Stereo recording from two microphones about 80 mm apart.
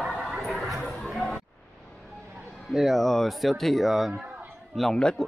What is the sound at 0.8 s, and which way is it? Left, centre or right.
Chatter, centre.